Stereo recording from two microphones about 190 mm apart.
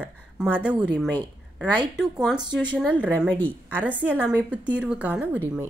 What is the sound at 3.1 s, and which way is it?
Speech, 10° left (ahead or behind).